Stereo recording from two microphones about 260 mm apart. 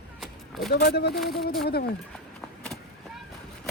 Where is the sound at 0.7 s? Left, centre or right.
Left.